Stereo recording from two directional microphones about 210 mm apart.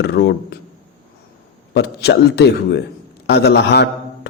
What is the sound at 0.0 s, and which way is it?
Speech, 55° left (ahead or behind).